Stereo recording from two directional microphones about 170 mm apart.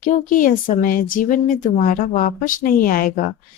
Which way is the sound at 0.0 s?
50° left (ahead or behind).